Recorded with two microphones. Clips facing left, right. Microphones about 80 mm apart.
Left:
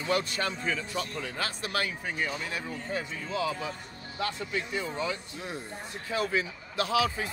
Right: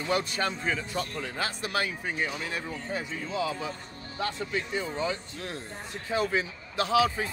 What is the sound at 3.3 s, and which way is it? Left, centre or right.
Speech, right.